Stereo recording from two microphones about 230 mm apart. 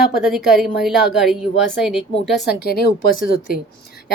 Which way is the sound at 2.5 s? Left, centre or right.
Left.